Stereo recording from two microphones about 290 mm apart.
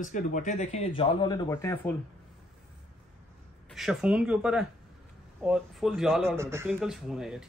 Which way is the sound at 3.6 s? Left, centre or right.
Centre.